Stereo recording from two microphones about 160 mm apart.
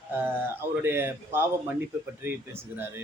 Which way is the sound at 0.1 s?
15° right (ahead or behind).